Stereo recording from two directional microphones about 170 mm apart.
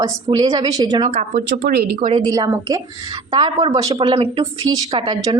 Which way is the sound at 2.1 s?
25° right (ahead or behind).